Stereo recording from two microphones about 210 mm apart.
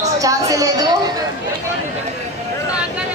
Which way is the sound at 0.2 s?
15° right (ahead or behind).